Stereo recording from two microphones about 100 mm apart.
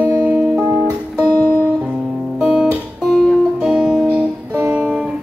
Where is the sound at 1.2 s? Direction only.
15° left (ahead or behind).